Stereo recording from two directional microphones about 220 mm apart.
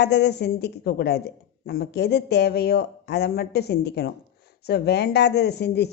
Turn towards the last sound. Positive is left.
turn(degrees=50)  # may be behind; listen again after turning